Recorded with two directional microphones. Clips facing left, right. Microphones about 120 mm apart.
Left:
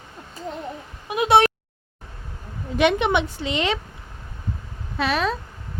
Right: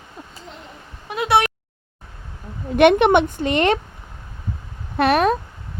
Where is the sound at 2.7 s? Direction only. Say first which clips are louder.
Right 6 dB; 60° right (ahead or behind).